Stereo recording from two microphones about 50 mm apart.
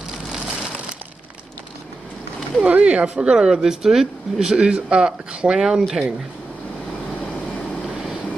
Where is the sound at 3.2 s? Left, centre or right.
Centre.